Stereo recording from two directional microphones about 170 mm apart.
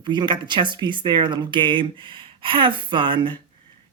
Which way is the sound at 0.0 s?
25° right (ahead or behind).